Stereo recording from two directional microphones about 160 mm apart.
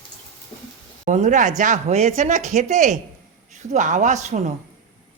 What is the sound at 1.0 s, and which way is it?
Speech, 50° right (ahead or behind).